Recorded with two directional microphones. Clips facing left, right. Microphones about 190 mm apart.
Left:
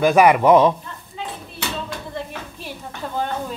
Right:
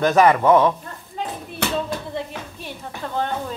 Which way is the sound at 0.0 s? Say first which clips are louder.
Left 2 dB; 10° left (ahead or behind).